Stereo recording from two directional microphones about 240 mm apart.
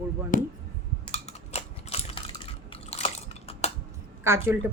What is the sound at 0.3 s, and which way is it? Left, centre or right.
Speech, left.